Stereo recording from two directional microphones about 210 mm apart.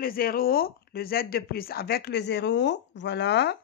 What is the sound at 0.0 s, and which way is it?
Speech, 45° left (ahead or behind).